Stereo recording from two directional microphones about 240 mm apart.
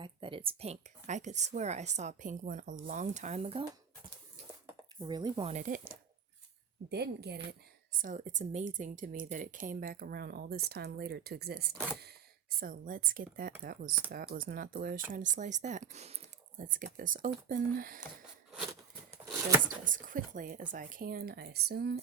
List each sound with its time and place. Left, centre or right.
0.0 s speech: right
4.9 s a woman's voice: centre; by 7.4 s right
7.9 s speech: right
19.1 s a sound: centre
19.6 s speech: right